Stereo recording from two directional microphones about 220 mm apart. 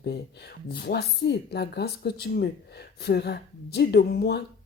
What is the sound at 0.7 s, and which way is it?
Speech, 45° left (ahead or behind).